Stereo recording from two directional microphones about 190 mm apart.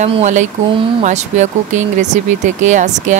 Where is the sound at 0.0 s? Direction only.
35° right (ahead or behind).